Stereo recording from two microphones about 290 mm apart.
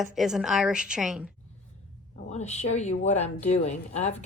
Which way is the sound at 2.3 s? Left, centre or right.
Left.